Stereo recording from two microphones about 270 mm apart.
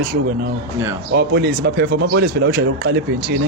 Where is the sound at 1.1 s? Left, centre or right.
Right.